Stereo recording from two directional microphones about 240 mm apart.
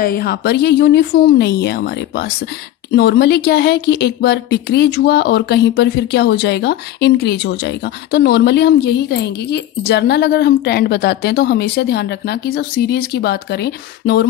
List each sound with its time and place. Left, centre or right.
0.0 s speech: left